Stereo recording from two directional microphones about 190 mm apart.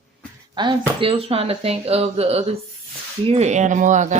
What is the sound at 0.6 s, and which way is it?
Speech, 25° right (ahead or behind).